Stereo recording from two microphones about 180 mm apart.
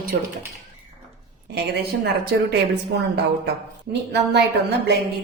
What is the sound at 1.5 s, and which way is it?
A woman's voice, 65° right (ahead or behind).